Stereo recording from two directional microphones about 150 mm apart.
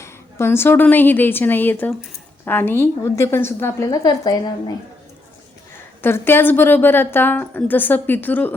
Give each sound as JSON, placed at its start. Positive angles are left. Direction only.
{"t": 0.0, "sound": "a woman's voice", "side_deg": 15}
{"t": 6.0, "sound": "a woman's voice", "side_deg": 15}